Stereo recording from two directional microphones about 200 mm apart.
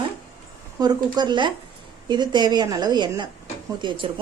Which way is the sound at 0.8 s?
20° right (ahead or behind).